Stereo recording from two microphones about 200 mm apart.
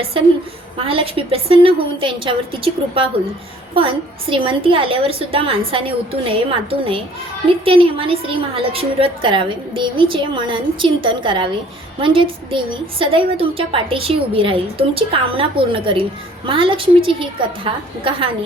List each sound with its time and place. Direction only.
0.9 s a woman's voice: 25° right (ahead or behind)